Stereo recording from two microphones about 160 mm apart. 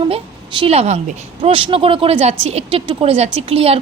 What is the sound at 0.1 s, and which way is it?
A woman's voice, 35° right (ahead or behind).